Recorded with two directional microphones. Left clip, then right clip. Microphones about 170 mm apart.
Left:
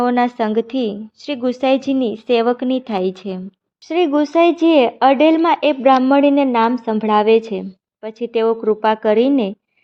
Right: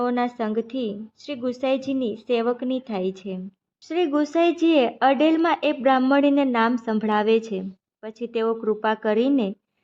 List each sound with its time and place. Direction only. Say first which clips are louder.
0.0 s a woman's voice: left 8 dB; 40° left (ahead or behind)
3.8 s speech: left 7 dB; 25° left (ahead or behind)